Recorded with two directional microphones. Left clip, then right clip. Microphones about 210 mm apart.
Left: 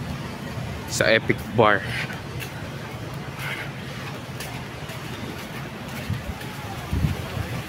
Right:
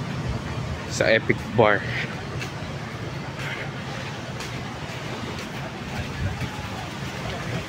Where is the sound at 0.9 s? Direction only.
15° left (ahead or behind).